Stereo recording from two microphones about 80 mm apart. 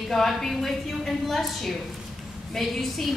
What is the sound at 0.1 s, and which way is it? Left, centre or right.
A woman's voice, centre.